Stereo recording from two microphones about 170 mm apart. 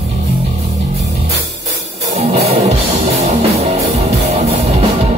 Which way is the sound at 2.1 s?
35° right (ahead or behind).